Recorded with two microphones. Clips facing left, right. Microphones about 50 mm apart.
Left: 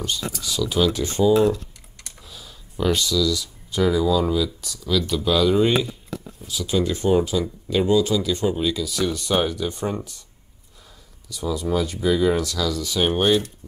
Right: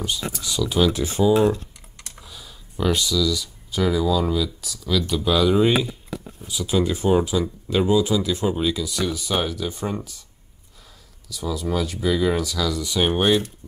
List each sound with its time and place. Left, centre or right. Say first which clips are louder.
0.0 s speech: even; centre
1.3 s speech: even; right
2.2 s speech: even; centre
11.3 s speech: left 2 dB; centre